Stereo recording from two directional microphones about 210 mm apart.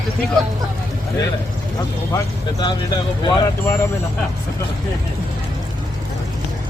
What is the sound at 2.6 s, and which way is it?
Speech, 20° left (ahead or behind).